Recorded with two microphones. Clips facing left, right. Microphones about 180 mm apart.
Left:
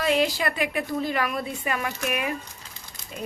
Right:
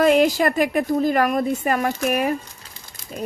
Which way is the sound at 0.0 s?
50° right (ahead or behind).